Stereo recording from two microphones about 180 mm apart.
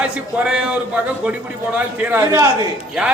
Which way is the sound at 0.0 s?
5° right (ahead or behind).